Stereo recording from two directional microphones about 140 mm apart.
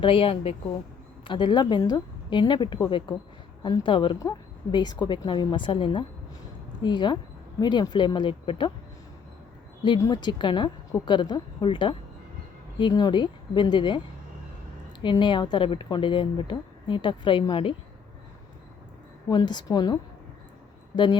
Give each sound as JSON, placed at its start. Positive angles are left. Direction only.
{"t": 0.0, "sound": "a woman's voice", "side_deg": 40}
{"t": 10.0, "sound": "a woman's voice", "side_deg": 30}
{"t": 15.0, "sound": "a woman's voice", "side_deg": 35}
{"t": 19.3, "sound": "a woman's voice", "side_deg": 30}